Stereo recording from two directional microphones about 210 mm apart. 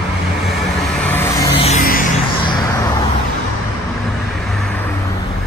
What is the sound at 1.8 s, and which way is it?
Music, 40° left (ahead or behind).